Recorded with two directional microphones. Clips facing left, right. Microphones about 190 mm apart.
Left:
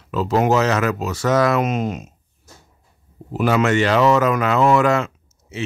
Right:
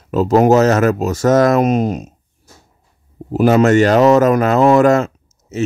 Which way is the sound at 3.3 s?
45° right (ahead or behind).